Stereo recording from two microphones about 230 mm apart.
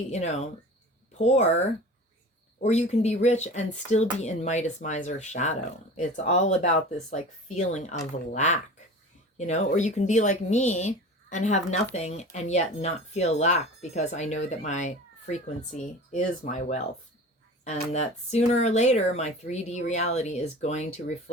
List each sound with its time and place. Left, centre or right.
0.1 s speech: left